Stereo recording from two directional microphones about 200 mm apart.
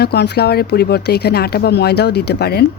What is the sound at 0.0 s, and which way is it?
Speech, 55° left (ahead or behind).